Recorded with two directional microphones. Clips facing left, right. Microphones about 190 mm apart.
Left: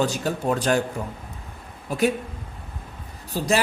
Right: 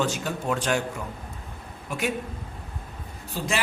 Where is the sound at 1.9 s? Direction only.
35° left (ahead or behind).